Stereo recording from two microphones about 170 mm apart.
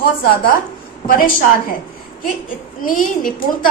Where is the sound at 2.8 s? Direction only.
55° left (ahead or behind).